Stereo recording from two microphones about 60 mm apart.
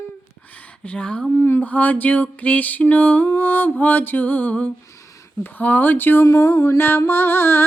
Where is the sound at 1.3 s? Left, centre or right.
Left.